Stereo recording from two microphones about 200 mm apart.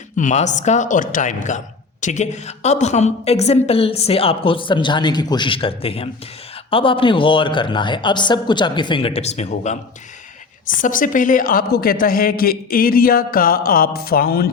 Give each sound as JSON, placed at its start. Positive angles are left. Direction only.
{"t": 0.2, "sound": "a man's voice", "side_deg": 35}
{"t": 10.8, "sound": "a woman's voice", "side_deg": 40}